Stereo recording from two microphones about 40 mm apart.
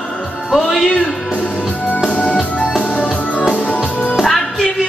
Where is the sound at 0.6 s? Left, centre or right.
Centre.